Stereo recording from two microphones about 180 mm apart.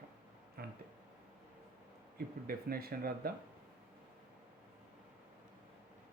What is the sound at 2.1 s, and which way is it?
Speech, 55° right (ahead or behind).